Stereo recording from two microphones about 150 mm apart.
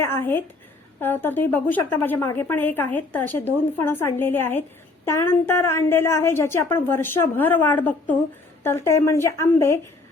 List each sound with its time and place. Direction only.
0.0 s a woman's voice: 15° left (ahead or behind)